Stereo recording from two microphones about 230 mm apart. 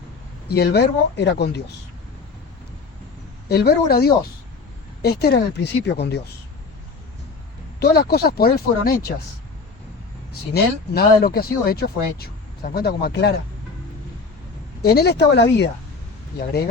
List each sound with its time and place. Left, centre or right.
0.5 s speech: left
3.5 s speech: left
7.8 s speech: left
10.5 s speech: left
14.8 s speech: left